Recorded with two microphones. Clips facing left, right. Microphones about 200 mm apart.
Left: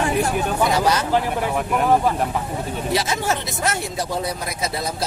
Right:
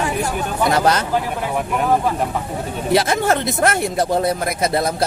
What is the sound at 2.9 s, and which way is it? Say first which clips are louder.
Speech: right 7 dB; 55° right (ahead or behind).